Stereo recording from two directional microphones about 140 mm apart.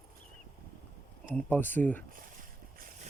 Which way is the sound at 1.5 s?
15° left (ahead or behind).